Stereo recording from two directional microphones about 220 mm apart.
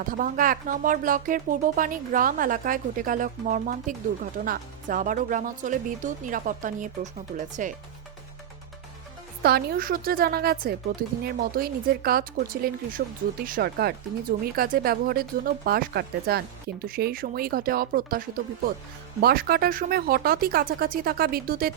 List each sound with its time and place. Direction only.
0.1 s speech: 40° right (ahead or behind)
9.4 s speech: 45° right (ahead or behind)